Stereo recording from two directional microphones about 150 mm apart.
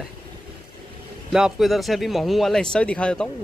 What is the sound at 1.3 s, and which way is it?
Speech, centre (ahead or behind).